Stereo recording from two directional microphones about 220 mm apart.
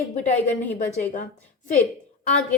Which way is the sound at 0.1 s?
35° left (ahead or behind).